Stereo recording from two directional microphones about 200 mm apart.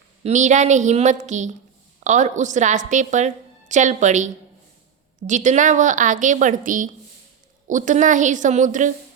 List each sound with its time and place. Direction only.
0.2 s a woman's voice: 35° right (ahead or behind)